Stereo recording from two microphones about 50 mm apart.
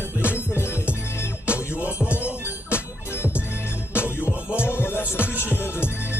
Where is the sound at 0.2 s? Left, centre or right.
Right.